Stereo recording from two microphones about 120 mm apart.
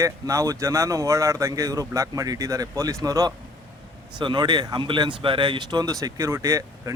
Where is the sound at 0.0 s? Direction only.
25° right (ahead or behind).